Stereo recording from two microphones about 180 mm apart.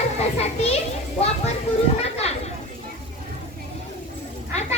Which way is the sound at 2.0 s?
35° left (ahead or behind).